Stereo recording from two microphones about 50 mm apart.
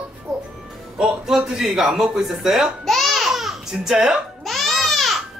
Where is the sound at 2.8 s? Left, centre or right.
Centre.